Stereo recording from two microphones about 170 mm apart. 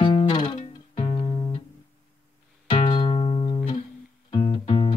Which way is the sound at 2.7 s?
30° left (ahead or behind).